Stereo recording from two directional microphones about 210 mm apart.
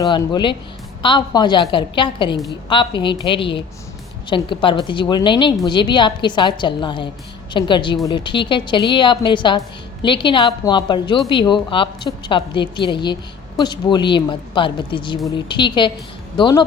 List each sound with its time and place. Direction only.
0.0 s a woman's voice: 20° left (ahead or behind)